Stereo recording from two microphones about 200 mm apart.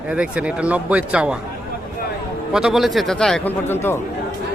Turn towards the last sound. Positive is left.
turn(degrees=10)  # may be behind; listen again after turning